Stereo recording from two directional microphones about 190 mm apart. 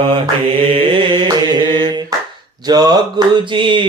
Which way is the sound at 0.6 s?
30° right (ahead or behind).